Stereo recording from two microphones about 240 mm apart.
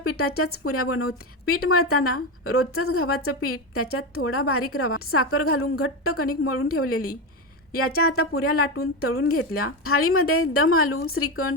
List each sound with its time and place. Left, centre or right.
0.0 s a woman's voice: left